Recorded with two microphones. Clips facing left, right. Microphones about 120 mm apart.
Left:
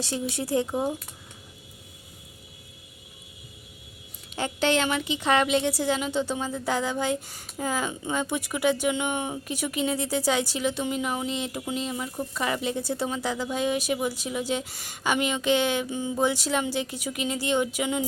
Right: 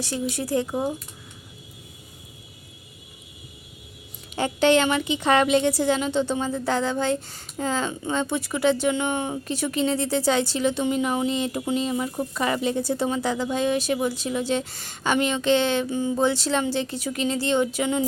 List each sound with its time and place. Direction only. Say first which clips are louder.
0.0 s speech: right 2 dB; 20° left (ahead or behind)
4.4 s a woman's voice: right 5 dB; centre (ahead or behind)
12.6 s speech: right 4 dB; centre (ahead or behind)